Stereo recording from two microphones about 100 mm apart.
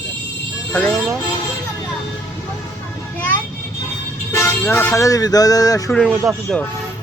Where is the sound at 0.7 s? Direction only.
15° left (ahead or behind).